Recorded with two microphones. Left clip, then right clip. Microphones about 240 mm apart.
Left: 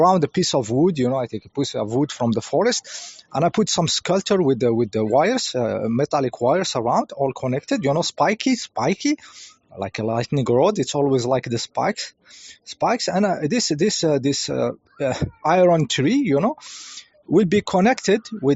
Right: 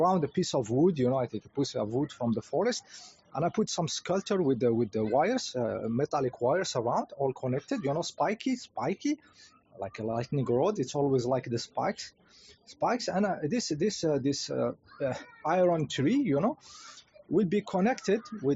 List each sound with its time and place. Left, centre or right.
0.0 s speech: left